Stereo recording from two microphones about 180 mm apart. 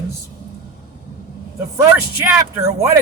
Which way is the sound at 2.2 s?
15° right (ahead or behind).